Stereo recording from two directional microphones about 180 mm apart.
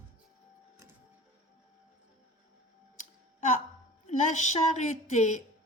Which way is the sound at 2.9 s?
40° left (ahead or behind).